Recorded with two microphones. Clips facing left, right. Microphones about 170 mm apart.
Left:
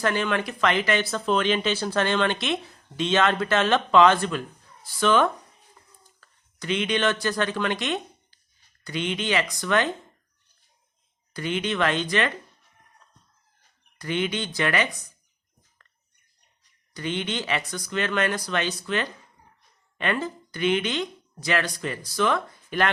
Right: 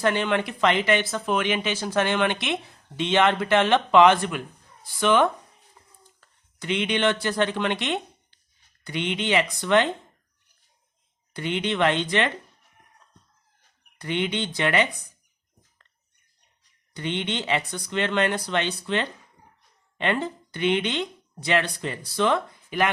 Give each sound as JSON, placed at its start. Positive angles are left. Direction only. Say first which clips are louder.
{"t": 0.0, "sound": "speech", "louder": "right 2 dB", "side_deg": -20}
{"t": 11.3, "sound": "speech", "louder": "right 1 dB", "side_deg": -20}
{"t": 14.0, "sound": "speech", "louder": "even", "side_deg": -20}
{"t": 16.9, "sound": "speech", "louder": "even", "side_deg": -20}